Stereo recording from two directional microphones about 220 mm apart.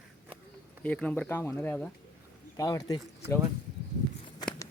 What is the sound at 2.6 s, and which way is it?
Speech, 15° left (ahead or behind).